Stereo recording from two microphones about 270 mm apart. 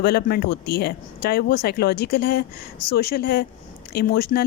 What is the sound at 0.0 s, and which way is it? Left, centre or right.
Speech, left.